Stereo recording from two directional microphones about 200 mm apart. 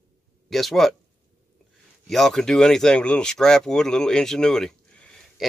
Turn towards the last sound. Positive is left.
turn(degrees=5)  # may be behind; listen again after turning